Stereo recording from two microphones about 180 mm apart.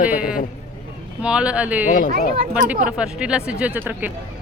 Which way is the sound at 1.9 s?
45° left (ahead or behind).